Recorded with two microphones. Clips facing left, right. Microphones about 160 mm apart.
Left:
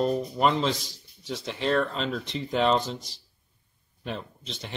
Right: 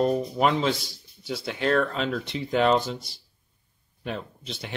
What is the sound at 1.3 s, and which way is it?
Speech, centre (ahead or behind).